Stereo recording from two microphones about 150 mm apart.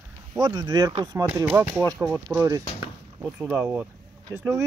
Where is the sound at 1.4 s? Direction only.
10° right (ahead or behind).